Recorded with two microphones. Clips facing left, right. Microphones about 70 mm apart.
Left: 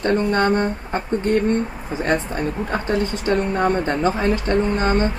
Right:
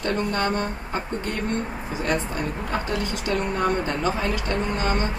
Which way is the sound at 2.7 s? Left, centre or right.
Left.